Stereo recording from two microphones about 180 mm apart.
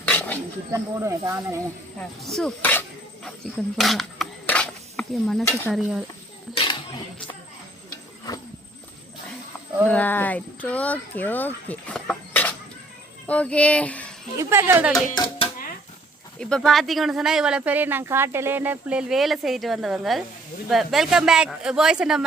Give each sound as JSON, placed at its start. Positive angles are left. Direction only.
{"t": 0.1, "sound": "snake", "side_deg": 10}
{"t": 0.7, "sound": "speech", "side_deg": -15}
{"t": 2.0, "sound": "speech", "side_deg": 0}
{"t": 3.2, "sound": "a sound", "side_deg": 0}
{"t": 5.7, "sound": "speech", "side_deg": -5}
{"t": 6.5, "sound": "speech", "side_deg": 30}
{"t": 9.9, "sound": "speech", "side_deg": 10}
{"t": 14.3, "sound": "speech", "side_deg": -15}
{"t": 15.1, "sound": "speech", "side_deg": 25}
{"t": 16.4, "sound": "speech", "side_deg": 5}